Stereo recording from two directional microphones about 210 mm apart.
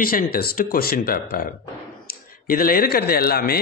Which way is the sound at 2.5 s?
45° left (ahead or behind).